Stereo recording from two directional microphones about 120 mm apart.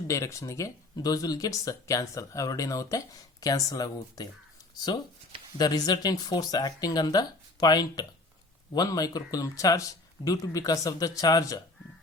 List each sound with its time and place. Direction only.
0.1 s speech: 25° left (ahead or behind)